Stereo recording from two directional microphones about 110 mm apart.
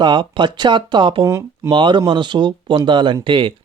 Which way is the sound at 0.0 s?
45° right (ahead or behind).